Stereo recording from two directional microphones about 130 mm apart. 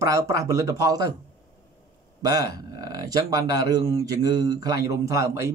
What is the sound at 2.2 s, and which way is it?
Speech, 30° right (ahead or behind).